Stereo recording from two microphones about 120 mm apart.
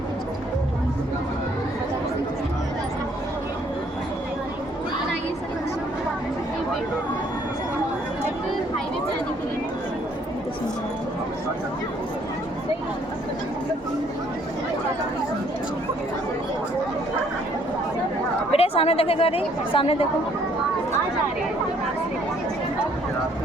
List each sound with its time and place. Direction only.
18.5 s a woman's voice: 55° left (ahead or behind)